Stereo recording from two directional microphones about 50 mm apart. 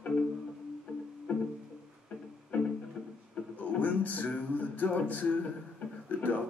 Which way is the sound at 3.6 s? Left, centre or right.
Left.